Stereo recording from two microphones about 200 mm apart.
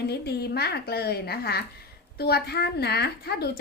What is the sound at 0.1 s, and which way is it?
A woman's voice, 55° left (ahead or behind).